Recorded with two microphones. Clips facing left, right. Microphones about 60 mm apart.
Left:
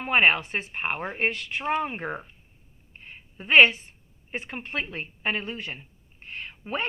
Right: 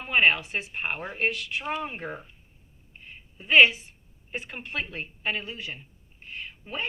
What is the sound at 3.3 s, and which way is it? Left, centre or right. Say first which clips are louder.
Speech: left 1 dB; left.